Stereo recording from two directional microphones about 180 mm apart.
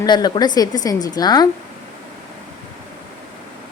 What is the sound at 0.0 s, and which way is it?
A woman's voice, 25° left (ahead or behind).